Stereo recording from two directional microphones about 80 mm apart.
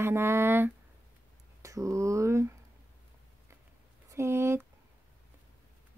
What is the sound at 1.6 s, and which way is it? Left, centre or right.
Speech, right.